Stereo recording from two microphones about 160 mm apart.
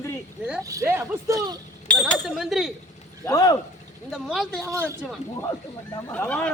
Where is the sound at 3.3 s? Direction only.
25° left (ahead or behind).